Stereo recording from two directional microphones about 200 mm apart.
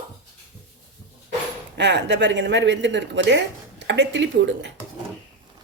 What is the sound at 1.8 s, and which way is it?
Speech, 60° right (ahead or behind).